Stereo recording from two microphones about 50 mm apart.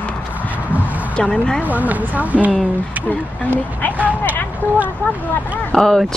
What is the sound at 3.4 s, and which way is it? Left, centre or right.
Speech, left.